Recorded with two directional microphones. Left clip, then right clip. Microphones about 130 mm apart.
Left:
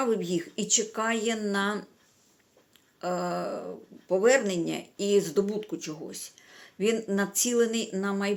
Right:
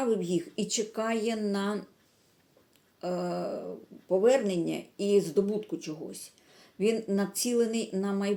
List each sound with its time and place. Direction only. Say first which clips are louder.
0.0 s speech: left 1 dB; 15° right (ahead or behind)
3.0 s speech: left 2 dB; 20° right (ahead or behind)